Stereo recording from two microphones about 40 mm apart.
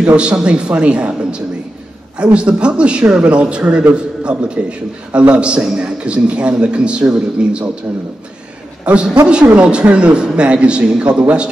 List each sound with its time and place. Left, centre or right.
0.0 s a man's voice: right
8.8 s a man's voice: right